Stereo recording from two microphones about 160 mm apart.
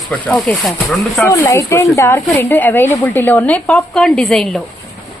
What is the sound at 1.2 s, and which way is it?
Speech, 15° left (ahead or behind).